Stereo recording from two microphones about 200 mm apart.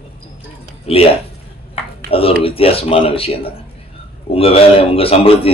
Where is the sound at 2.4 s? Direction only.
30° left (ahead or behind).